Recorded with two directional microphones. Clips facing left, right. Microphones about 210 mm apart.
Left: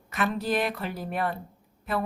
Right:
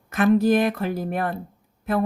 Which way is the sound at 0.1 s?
45° right (ahead or behind).